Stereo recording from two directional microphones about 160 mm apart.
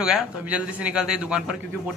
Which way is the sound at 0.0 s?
5° right (ahead or behind).